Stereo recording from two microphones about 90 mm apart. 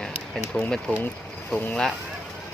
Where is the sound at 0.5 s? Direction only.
10° left (ahead or behind).